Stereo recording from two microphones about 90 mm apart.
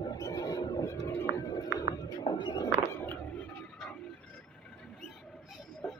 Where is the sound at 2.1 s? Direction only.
55° left (ahead or behind).